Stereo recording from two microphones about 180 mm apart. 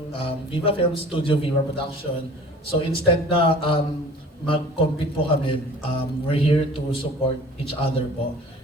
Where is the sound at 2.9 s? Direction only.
30° left (ahead or behind).